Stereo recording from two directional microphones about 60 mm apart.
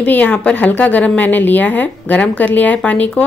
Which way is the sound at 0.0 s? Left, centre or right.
Left.